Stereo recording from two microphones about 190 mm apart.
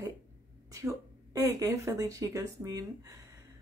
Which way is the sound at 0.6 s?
15° right (ahead or behind).